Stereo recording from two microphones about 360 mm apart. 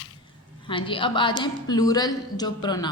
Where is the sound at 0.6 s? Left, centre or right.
Centre.